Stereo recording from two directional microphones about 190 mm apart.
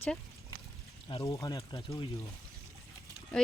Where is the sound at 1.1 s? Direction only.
20° left (ahead or behind).